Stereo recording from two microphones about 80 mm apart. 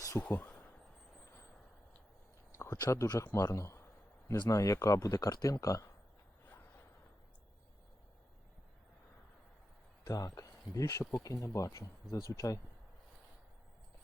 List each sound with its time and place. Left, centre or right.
0.2 s speech: centre
2.5 s speech: left
10.1 s speech: left